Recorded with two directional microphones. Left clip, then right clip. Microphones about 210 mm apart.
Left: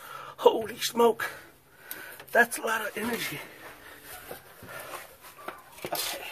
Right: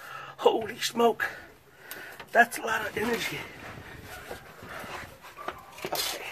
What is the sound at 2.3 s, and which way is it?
Speech, 35° left (ahead or behind).